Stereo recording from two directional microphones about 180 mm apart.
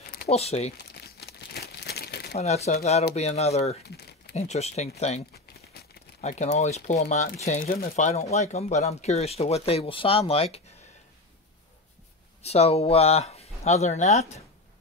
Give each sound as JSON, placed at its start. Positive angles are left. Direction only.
{"t": 0.3, "sound": "speech", "side_deg": 35}
{"t": 0.8, "sound": "crumpling", "side_deg": 60}
{"t": 2.3, "sound": "speech", "side_deg": 35}
{"t": 3.8, "sound": "crumpling", "side_deg": 65}
{"t": 4.4, "sound": "speech", "side_deg": 35}
{"t": 6.2, "sound": "speech", "side_deg": 40}
{"t": 7.7, "sound": "speech", "side_deg": 50}
{"t": 12.4, "sound": "speech", "side_deg": 35}